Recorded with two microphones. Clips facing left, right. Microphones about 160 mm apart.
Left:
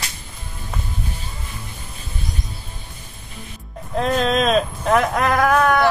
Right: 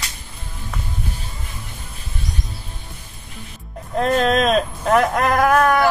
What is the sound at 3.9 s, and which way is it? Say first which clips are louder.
Speech: right 2 dB; centre (ahead or behind).